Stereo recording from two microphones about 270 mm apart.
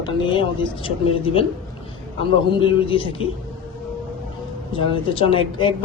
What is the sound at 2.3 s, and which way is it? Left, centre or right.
Speech, centre.